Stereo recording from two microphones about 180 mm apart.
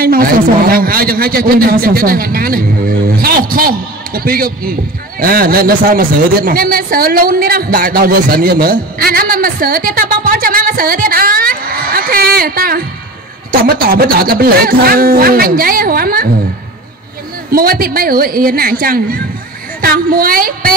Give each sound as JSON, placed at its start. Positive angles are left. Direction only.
{"t": 0.0, "sound": "a man's voice", "side_deg": -55}
{"t": 17.5, "sound": "a man's voice", "side_deg": -55}